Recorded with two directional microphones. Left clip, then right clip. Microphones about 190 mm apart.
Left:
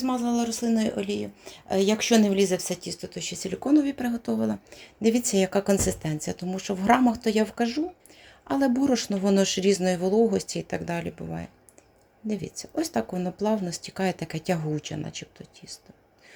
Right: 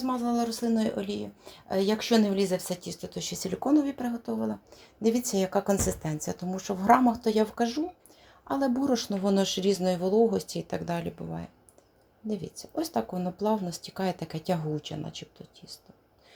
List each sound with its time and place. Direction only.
0.0 s speech: 20° left (ahead or behind)